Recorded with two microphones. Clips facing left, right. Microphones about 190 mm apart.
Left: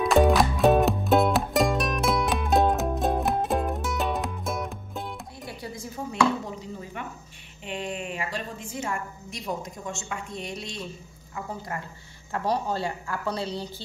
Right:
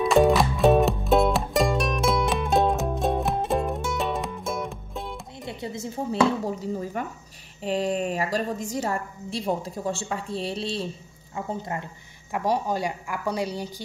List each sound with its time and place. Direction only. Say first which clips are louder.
0.0 s music: right 1 dB; centre (ahead or behind)
5.4 s music: right 6 dB; 25° right (ahead or behind)
6.4 s a woman's voice: right 8 dB; 40° right (ahead or behind); by 11.8 s 25° right (ahead or behind)
12.3 s a woman's voice: right 2 dB; 15° right (ahead or behind)